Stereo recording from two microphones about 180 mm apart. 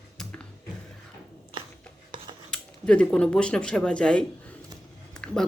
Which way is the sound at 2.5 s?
5° left (ahead or behind).